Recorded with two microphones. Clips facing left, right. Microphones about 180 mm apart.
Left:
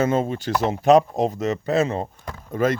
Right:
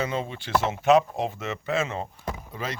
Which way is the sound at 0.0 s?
45° left (ahead or behind).